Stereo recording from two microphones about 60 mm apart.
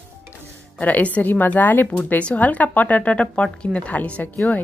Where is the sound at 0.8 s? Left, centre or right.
Left.